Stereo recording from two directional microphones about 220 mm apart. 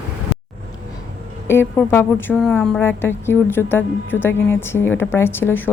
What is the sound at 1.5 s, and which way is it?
A woman's voice, 10° left (ahead or behind).